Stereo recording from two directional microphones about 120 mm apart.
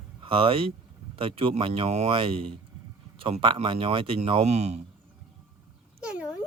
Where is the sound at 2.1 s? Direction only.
50° right (ahead or behind); by 4.8 s 65° right (ahead or behind).